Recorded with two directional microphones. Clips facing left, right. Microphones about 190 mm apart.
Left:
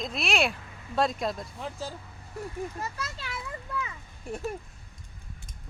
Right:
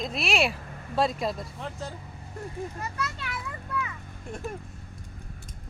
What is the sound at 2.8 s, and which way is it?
Children playing, 30° left (ahead or behind).